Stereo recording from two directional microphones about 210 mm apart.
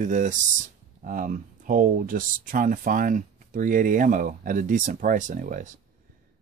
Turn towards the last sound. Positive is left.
turn(degrees=-40)  # may be behind; listen again after turning